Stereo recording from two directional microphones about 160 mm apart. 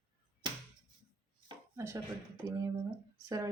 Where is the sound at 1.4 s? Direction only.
20° right (ahead or behind).